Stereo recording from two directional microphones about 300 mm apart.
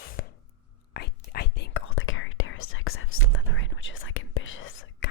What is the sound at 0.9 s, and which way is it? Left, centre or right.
Whispering, left.